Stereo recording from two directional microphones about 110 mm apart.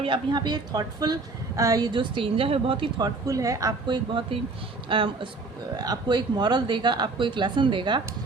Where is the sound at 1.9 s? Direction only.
50° right (ahead or behind).